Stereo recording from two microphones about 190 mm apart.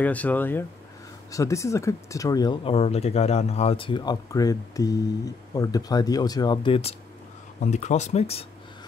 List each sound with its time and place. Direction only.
0.0 s speech: 10° left (ahead or behind); by 8.5 s 35° left (ahead or behind)